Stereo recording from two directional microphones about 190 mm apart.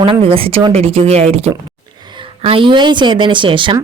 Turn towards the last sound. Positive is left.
turn(degrees=-25)  # may be behind; listen again after turning